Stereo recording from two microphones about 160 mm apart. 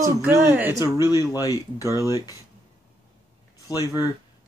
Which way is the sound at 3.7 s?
25° left (ahead or behind).